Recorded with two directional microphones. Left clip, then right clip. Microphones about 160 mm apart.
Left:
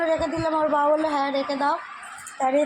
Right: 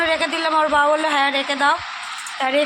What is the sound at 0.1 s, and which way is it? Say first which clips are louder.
Speech: right 4 dB; 20° right (ahead or behind).